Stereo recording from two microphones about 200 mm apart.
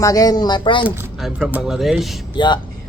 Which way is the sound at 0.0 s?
20° left (ahead or behind).